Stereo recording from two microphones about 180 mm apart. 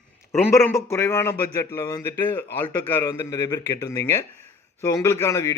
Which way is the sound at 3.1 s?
20° left (ahead or behind).